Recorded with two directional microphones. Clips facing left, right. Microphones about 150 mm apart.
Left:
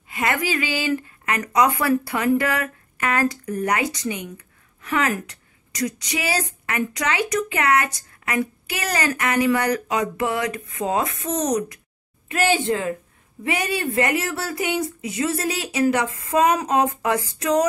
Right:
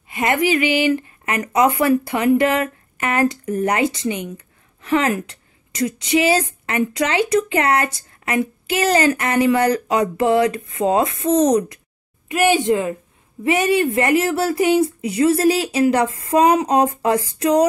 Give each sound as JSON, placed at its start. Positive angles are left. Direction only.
{"t": 0.1, "sound": "speech", "side_deg": -20}
{"t": 12.3, "sound": "speech", "side_deg": -15}